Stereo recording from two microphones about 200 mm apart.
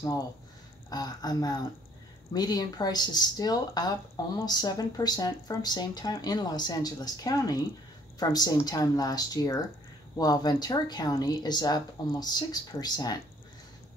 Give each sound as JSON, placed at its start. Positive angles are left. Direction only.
{"t": 0.8, "sound": "speech", "side_deg": 20}